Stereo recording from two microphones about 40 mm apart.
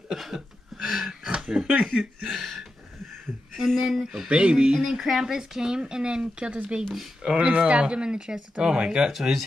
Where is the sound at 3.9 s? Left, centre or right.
Centre.